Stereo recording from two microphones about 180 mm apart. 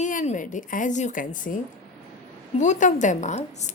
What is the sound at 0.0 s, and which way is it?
A woman's voice, 45° left (ahead or behind).